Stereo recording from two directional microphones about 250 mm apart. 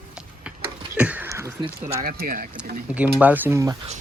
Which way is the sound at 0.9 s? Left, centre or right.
Centre.